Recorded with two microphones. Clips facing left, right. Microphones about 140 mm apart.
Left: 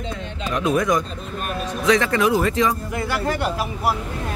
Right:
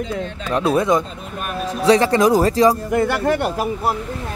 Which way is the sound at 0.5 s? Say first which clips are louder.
Right 3 dB; 35° right (ahead or behind).